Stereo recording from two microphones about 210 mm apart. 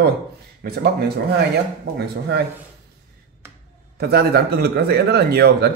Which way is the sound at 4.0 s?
50° right (ahead or behind).